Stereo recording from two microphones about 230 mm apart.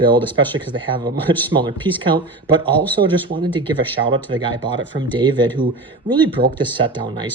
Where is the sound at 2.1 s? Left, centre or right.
Right.